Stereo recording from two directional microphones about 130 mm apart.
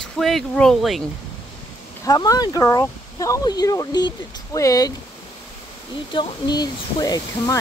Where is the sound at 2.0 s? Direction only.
30° left (ahead or behind).